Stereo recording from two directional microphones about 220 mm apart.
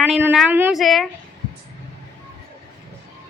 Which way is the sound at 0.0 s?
10° right (ahead or behind).